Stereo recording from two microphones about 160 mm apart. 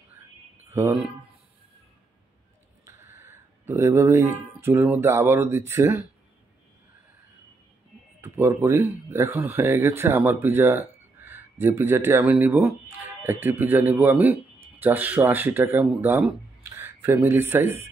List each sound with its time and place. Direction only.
0.7 s speech: 15° right (ahead or behind)
2.8 s speech: 15° right (ahead or behind)
8.2 s speech: 15° right (ahead or behind)